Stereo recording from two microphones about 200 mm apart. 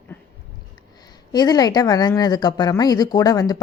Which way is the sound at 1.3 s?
20° left (ahead or behind).